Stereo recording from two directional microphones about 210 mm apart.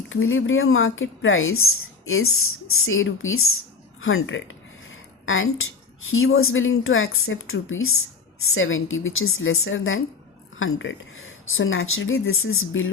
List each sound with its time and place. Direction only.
0.1 s speech: 70° left (ahead or behind)
4.0 s a sound: 70° left (ahead or behind)
6.1 s speech: 75° left (ahead or behind)